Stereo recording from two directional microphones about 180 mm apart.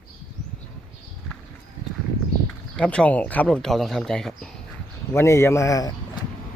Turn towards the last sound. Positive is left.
turn(degrees=20)  # may be behind; listen again after turning